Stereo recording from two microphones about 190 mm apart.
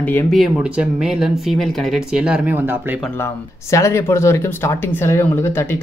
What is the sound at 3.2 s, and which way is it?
Speech, 15° left (ahead or behind).